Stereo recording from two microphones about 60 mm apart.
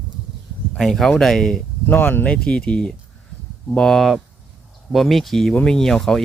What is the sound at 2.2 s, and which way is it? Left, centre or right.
Speech, centre.